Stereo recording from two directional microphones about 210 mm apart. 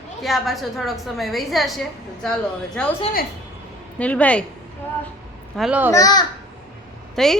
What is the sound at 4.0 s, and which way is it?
Speech, 5° left (ahead or behind).